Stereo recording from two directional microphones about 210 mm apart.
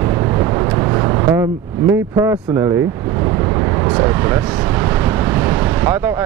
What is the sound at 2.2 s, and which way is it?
Speech, 15° right (ahead or behind).